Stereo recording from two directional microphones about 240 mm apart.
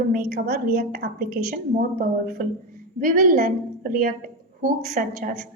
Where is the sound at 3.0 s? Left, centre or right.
Right.